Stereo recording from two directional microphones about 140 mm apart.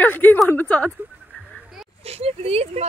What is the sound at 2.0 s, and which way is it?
Speech, 45° right (ahead or behind).